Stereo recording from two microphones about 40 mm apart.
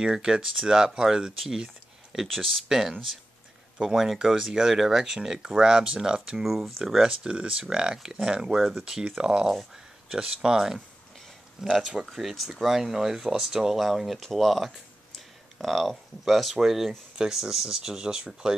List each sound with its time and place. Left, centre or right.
0.0 s speech: centre
2.2 s speech: centre
6.4 s speech: centre
6.8 s speech: centre
7.1 s speech: right
8.5 s speech: centre
8.8 s speech: centre
12.1 s speech: centre; by 18.5 s right